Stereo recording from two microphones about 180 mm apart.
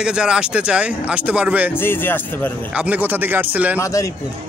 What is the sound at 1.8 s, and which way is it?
Speech, 10° left (ahead or behind).